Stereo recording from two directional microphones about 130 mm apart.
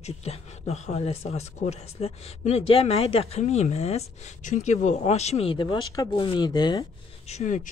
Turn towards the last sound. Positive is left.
turn(degrees=60)  # may be behind; listen again after turning